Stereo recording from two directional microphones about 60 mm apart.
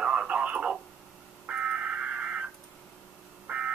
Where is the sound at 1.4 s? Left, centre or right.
Centre.